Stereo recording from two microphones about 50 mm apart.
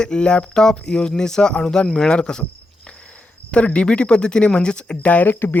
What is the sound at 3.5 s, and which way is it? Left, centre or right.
Speech, left.